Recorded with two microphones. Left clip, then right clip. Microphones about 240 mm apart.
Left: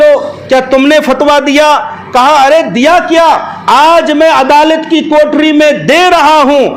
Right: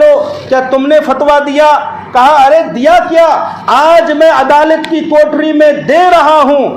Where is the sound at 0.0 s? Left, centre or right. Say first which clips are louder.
Even; left.